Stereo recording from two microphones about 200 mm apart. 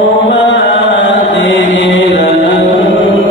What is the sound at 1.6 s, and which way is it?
Chant, 70° left (ahead or behind).